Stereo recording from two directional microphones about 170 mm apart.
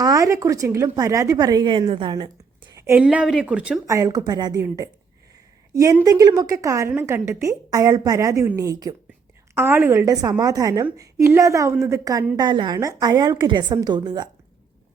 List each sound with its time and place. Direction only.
0.0 s a woman's voice: 20° right (ahead or behind)
2.8 s a woman's voice: 10° right (ahead or behind)
3.8 s a woman's voice: 20° right (ahead or behind)
12.4 s a woman's voice: 25° right (ahead or behind)